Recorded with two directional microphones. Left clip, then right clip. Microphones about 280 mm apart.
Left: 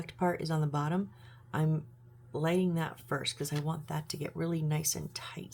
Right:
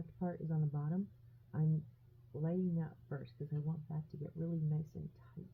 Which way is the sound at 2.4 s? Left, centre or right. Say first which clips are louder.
Left 10 dB; centre.